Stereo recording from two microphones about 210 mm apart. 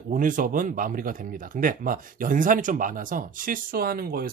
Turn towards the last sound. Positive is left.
turn(degrees=-45)  # may be behind; listen again after turning